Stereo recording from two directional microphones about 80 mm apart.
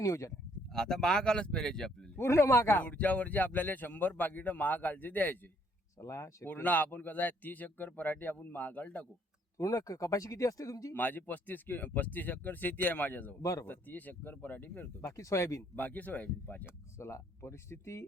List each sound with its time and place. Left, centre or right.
0.0 s speech: left
0.7 s speech: centre
2.1 s speech: left
2.7 s speech: centre
6.0 s speech: left
6.5 s speech: left
9.6 s speech: left
10.9 s speech: left
13.4 s speech: left
13.7 s speech: left
15.0 s speech: left
15.7 s speech: left
17.0 s speech: left